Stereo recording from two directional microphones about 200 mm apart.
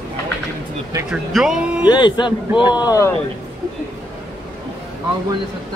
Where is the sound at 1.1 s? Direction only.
Centre (ahead or behind).